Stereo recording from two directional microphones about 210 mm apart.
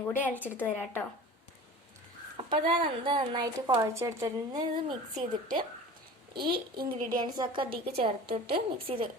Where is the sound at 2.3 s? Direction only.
25° right (ahead or behind).